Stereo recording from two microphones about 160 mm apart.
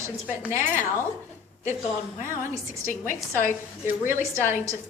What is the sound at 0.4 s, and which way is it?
Speech, 15° right (ahead or behind).